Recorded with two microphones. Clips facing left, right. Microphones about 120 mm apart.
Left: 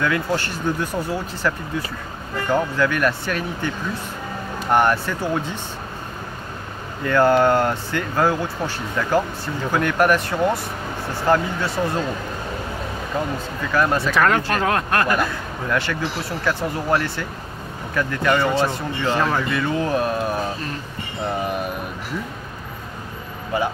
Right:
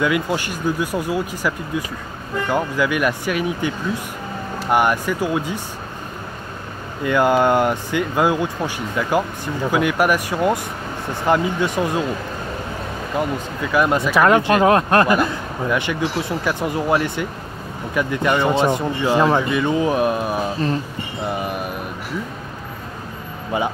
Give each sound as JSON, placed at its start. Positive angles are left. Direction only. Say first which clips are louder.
{"t": 0.0, "sound": "speech", "louder": "right 2 dB", "side_deg": -15}
{"t": 7.1, "sound": "speech", "louder": "even", "side_deg": -15}
{"t": 13.6, "sound": "speech", "louder": "right 2 dB", "side_deg": -10}
{"t": 23.5, "sound": "speech", "louder": "right 1 dB", "side_deg": -20}